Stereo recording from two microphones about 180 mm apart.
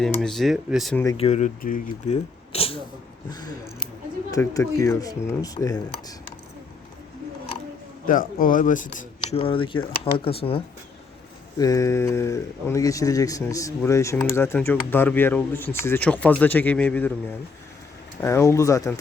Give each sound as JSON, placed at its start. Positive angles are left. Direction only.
{"t": 0.2, "sound": "speech", "side_deg": 0}
{"t": 1.1, "sound": "speech", "side_deg": 35}
{"t": 2.5, "sound": "a sound", "side_deg": 30}
{"t": 3.2, "sound": "speech", "side_deg": 20}
{"t": 8.0, "sound": "speech", "side_deg": 50}
{"t": 9.2, "sound": "speech", "side_deg": 30}
{"t": 11.5, "sound": "speech", "side_deg": 20}
{"t": 18.2, "sound": "speech", "side_deg": 15}